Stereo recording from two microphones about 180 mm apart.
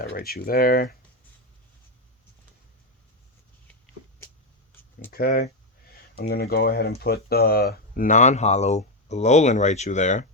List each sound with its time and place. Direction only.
0.0 s speech: 55° left (ahead or behind)
5.1 s speech: 55° left (ahead or behind)